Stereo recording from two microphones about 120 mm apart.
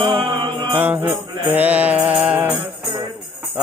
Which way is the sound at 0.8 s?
15° right (ahead or behind).